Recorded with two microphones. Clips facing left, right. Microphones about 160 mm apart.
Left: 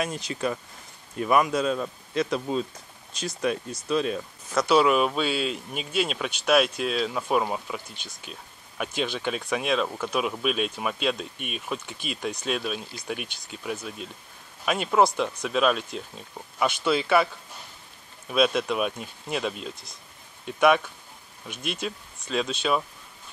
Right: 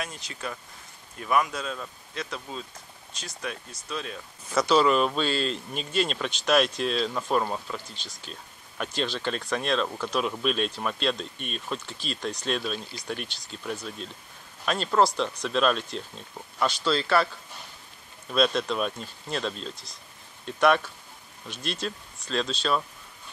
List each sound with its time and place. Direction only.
0.0 s speech: 25° left (ahead or behind)
3.4 s speech: 20° left (ahead or behind)
4.6 s speech: 5° left (ahead or behind)
18.3 s speech: 5° left (ahead or behind)